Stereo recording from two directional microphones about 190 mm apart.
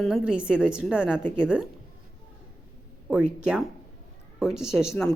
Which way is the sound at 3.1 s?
5° right (ahead or behind).